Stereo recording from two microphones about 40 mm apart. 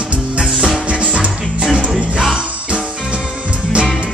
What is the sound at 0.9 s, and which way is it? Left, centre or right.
Music, right.